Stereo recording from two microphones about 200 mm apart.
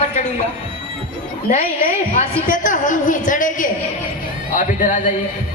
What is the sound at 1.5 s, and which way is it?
A woman's voice, 40° left (ahead or behind).